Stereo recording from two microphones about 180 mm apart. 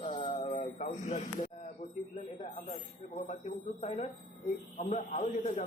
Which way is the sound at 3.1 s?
35° left (ahead or behind).